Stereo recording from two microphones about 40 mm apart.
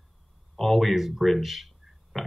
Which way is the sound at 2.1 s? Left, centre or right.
Centre.